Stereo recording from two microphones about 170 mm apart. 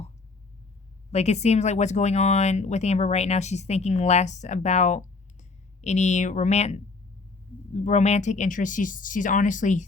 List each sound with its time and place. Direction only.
1.1 s speech: 40° left (ahead or behind)